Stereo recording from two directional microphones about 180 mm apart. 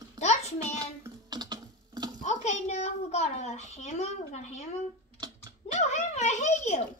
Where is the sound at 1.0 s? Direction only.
25° right (ahead or behind).